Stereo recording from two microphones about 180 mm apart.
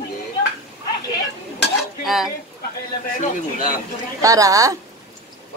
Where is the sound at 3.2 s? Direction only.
45° left (ahead or behind).